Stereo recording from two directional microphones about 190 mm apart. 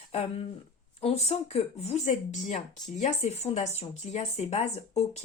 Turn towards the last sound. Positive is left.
turn(degrees=35)  # may be behind; listen again after turning